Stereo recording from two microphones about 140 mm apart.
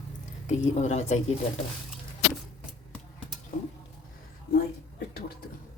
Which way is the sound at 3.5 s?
90° left.